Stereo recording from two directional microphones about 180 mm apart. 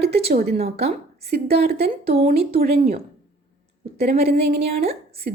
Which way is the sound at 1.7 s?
60° right (ahead or behind).